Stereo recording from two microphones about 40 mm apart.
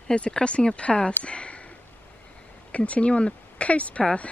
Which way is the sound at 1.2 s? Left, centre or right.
Left.